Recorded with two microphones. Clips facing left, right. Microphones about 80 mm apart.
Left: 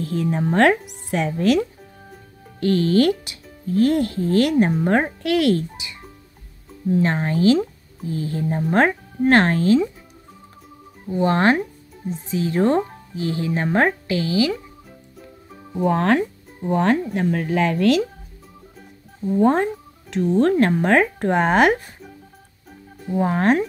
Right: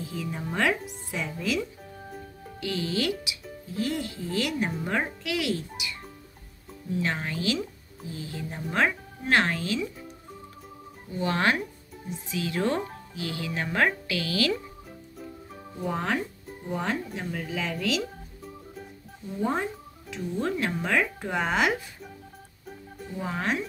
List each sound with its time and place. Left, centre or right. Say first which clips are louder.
0.0 s speech: left 11 dB; left
6.9 s speech: left 9 dB; left
11.1 s speech: left 8 dB; left
14.5 s music: left 3 dB; centre
15.8 s speech: left 10 dB; left
19.3 s speech: left 11 dB; left
23.1 s speech: left 11 dB; left